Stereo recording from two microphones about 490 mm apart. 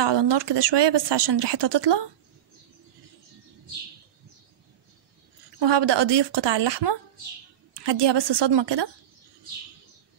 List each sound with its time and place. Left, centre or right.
0.0 s speech: right
5.6 s speech: right